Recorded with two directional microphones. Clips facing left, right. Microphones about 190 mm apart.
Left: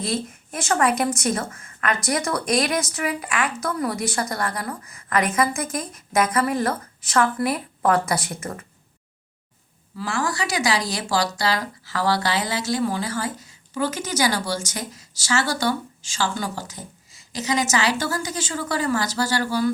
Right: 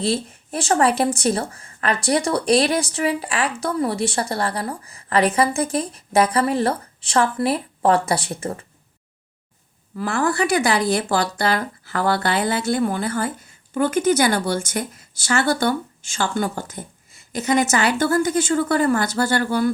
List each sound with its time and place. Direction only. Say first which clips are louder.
0.0 s speech: right 4 dB; 30° right (ahead or behind)
10.0 s speech: right 5 dB; 55° right (ahead or behind)